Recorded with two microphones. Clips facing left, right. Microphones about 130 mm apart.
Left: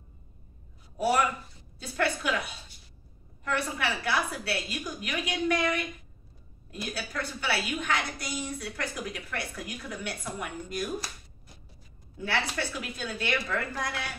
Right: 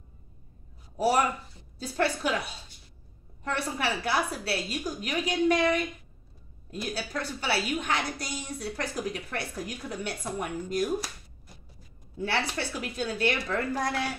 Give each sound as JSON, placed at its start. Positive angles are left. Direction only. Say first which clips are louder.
{"t": 0.9, "sound": "a woman's voice", "louder": "right 1 dB", "side_deg": -30}
{"t": 3.4, "sound": "a woman's voice", "louder": "even", "side_deg": -35}
{"t": 6.9, "sound": "a woman's voice", "louder": "right 2 dB", "side_deg": -30}
{"t": 12.2, "sound": "a woman's voice", "louder": "right 1 dB", "side_deg": -35}